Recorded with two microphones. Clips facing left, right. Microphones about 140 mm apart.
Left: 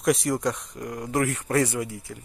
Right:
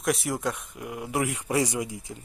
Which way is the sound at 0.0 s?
Centre (ahead or behind).